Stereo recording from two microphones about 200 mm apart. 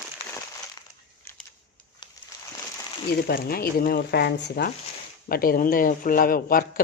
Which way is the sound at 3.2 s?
50° left (ahead or behind).